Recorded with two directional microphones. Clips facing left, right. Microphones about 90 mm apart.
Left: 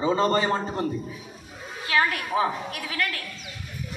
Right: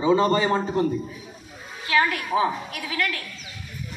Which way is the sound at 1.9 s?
40° left (ahead or behind).